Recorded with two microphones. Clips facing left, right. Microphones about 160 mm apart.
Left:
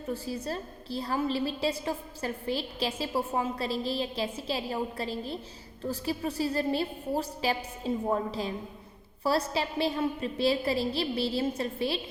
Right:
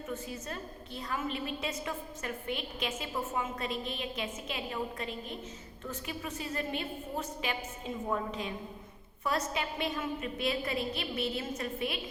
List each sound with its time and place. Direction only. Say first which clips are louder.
0.1 s a woman's voice: left 7 dB; 35° left (ahead or behind)